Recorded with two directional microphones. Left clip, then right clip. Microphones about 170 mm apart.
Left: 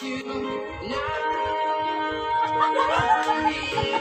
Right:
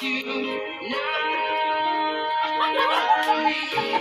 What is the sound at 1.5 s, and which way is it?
Music, 25° right (ahead or behind).